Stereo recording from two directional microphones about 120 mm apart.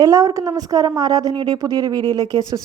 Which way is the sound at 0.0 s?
30° right (ahead or behind).